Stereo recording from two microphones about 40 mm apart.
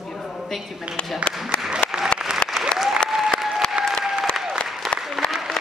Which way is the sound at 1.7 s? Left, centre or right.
Centre.